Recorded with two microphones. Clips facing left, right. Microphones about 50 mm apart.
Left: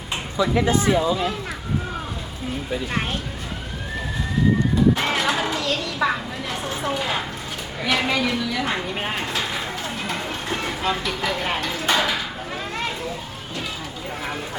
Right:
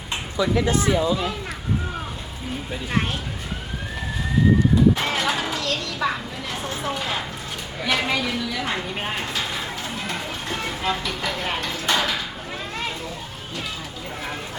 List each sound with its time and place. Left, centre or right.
0.5 s speech: left
0.9 s speech: centre
2.7 s speech: centre
4.9 s a sound: centre
6.5 s speech: centre